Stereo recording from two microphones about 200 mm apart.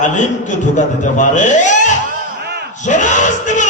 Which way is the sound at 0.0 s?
40° left (ahead or behind).